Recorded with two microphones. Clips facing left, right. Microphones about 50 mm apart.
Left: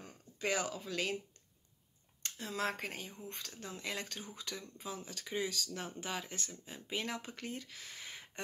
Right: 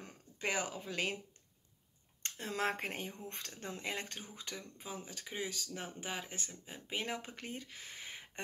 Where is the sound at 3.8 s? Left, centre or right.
Right.